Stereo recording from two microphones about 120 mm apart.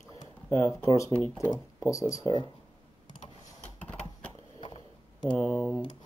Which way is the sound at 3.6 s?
10° left (ahead or behind).